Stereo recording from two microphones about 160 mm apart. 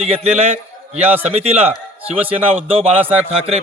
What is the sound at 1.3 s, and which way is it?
Speech, 40° right (ahead or behind).